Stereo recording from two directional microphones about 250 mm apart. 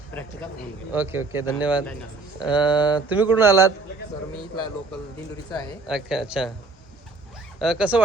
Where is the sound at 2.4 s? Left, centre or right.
Centre.